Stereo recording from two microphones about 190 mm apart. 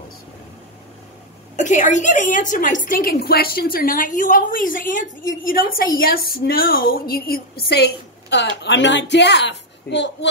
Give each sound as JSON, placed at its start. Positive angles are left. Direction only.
{"t": 1.6, "sound": "a woman's voice", "side_deg": 40}